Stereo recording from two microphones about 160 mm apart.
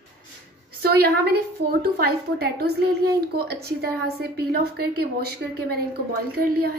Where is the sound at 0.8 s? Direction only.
75° right (ahead or behind).